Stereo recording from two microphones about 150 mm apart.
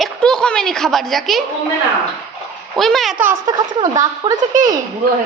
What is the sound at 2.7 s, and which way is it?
Speech, centre (ahead or behind).